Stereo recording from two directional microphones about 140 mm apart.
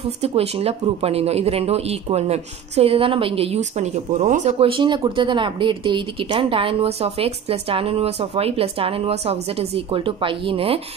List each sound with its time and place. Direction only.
0.0 s speech: 45° right (ahead or behind)
4.6 s speech: 35° right (ahead or behind)